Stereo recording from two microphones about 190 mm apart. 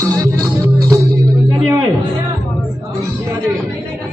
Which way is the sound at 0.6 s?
20° right (ahead or behind).